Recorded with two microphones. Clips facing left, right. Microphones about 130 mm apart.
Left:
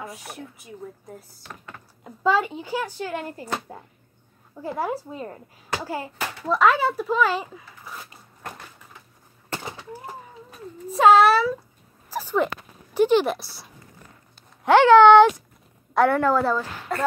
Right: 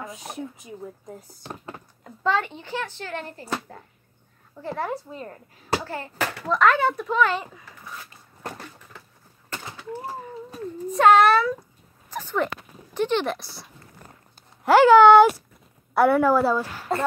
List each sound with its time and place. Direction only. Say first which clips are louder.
0.2 s speech: right 4 dB; 20° right (ahead or behind)
1.4 s speech: right 5 dB; 30° right (ahead or behind)
2.0 s speech: left 3 dB; 10° left (ahead or behind)
10.9 s a sound: left 1 dB; 5° left (ahead or behind)
12.9 s speech: left 5 dB; 10° left (ahead or behind)
14.6 s a woman's voice: even; 5° right (ahead or behind)